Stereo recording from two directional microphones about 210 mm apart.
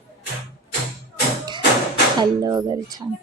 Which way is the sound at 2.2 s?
20° right (ahead or behind).